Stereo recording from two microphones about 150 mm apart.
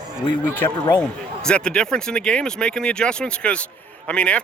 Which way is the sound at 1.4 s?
5° left (ahead or behind).